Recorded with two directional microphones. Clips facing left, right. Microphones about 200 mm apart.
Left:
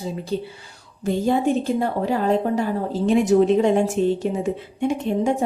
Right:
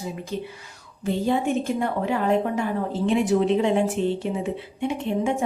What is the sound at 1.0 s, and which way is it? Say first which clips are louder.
A woman's voice: left 3 dB; 40° left (ahead or behind).